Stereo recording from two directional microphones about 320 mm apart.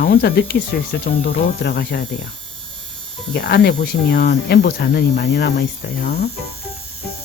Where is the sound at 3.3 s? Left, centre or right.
Left.